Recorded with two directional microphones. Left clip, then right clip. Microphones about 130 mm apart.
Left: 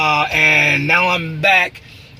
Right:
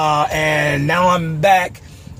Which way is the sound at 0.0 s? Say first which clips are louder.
Left 2 dB; 20° right (ahead or behind).